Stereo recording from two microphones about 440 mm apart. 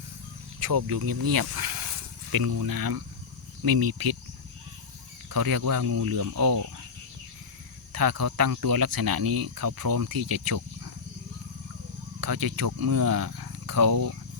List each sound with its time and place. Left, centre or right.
0.6 s speech: right
5.3 s speech: right
7.9 s speech: right
12.2 s speech: right